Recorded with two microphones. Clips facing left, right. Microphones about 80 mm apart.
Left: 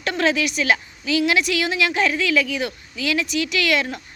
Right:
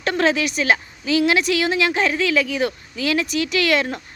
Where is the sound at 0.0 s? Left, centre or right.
Right.